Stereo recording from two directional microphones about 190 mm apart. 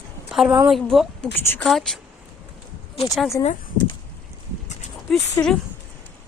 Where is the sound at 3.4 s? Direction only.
25° left (ahead or behind).